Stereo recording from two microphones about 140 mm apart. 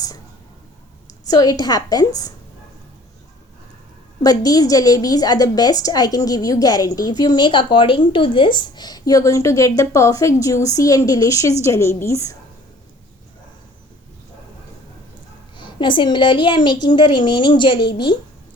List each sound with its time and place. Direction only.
1.3 s a woman's voice: 25° left (ahead or behind)
4.2 s a woman's voice: 25° left (ahead or behind)
15.5 s a woman's voice: 35° left (ahead or behind)